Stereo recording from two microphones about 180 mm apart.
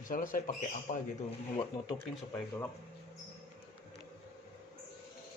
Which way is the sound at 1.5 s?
15° left (ahead or behind).